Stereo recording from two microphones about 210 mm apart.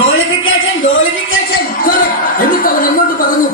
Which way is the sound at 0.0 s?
75° left (ahead or behind).